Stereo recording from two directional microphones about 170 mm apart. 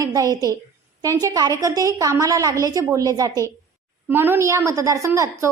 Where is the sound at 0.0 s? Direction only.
20° right (ahead or behind).